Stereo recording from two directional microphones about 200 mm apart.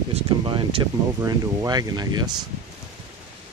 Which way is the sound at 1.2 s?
15° right (ahead or behind).